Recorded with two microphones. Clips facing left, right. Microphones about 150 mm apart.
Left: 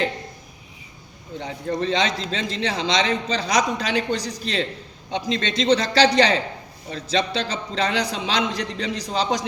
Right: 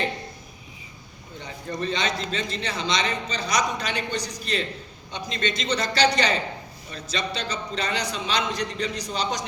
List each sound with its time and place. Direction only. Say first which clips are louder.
1.8 s a man's voice: left 3 dB; 90° left